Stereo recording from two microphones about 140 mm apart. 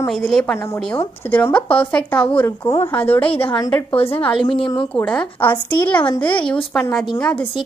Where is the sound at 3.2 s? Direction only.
40° left (ahead or behind).